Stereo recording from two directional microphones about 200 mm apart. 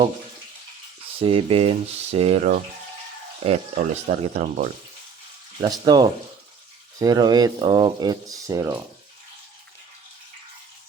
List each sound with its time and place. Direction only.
1.2 s speech: 30° right (ahead or behind)
5.8 s speech: 20° right (ahead or behind)